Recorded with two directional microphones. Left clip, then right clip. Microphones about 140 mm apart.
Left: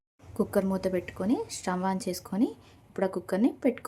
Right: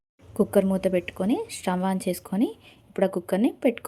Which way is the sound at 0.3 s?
20° right (ahead or behind).